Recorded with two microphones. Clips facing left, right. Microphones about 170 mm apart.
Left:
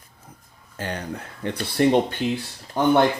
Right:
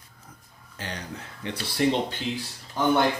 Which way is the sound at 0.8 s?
55° left (ahead or behind).